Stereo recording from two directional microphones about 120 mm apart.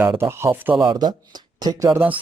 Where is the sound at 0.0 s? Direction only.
20° right (ahead or behind).